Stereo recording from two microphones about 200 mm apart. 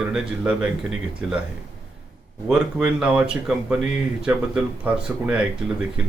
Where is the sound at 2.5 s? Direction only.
5° right (ahead or behind).